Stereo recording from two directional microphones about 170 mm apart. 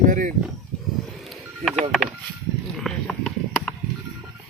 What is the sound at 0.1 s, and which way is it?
Speech, 50° right (ahead or behind).